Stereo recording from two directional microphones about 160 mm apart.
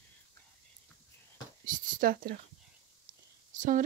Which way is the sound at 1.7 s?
60° right (ahead or behind).